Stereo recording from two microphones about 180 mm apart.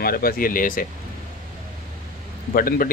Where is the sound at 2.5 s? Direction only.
50° left (ahead or behind).